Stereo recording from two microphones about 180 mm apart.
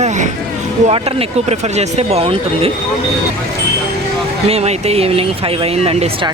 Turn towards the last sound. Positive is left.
turn(degrees=-30)  # may be behind; listen again after turning